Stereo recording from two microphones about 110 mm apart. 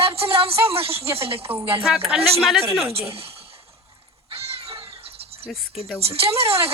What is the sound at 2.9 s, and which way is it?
Music, 60° right (ahead or behind).